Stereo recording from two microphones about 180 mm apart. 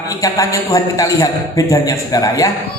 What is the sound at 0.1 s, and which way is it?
A man's voice, 20° left (ahead or behind).